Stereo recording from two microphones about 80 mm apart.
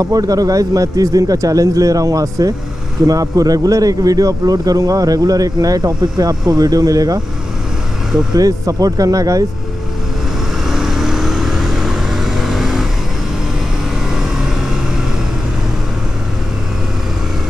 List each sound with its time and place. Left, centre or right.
0.0 s speech: right
8.4 s speech: right
10.7 s vehicle: centre
14.1 s vehicle: centre